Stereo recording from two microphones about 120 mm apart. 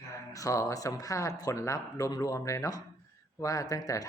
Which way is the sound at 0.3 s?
25° left (ahead or behind).